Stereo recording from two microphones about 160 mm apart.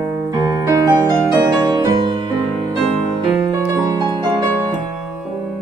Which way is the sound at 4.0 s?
25° right (ahead or behind).